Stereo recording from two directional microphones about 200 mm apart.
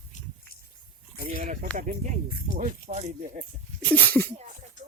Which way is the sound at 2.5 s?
30° right (ahead or behind).